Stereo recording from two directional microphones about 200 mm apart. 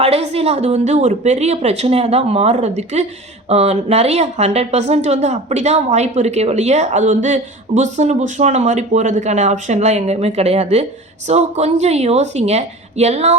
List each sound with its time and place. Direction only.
0.0 s speech: 30° right (ahead or behind)